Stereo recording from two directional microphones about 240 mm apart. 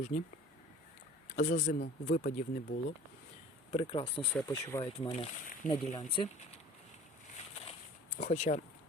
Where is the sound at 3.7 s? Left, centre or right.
Left.